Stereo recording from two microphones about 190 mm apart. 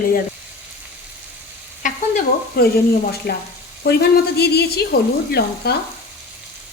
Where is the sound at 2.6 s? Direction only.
50° left (ahead or behind).